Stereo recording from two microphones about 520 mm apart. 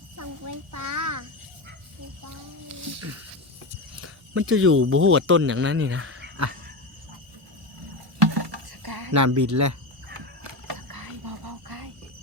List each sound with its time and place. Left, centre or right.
0.2 s a child's voice: right
2.6 s speech: right
8.2 s a sound: right